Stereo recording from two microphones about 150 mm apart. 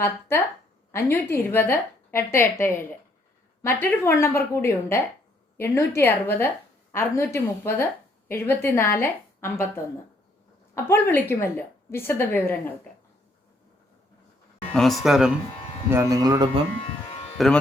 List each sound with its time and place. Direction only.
0.0 s a woman's voice: 15° left (ahead or behind)
10.8 s a woman's voice: 15° left (ahead or behind)
14.7 s speech: centre (ahead or behind)
15.9 s speech: 20° right (ahead or behind)
17.3 s speech: centre (ahead or behind)